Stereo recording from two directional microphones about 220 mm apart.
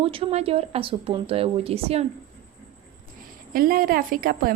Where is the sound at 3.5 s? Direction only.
40° right (ahead or behind).